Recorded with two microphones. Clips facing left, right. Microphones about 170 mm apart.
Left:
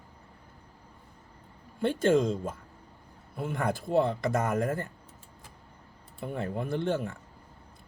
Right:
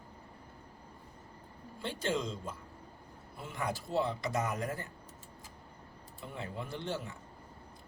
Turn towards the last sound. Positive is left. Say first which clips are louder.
# left 9 dB
turn(degrees=55)  # may be behind; listen again after turning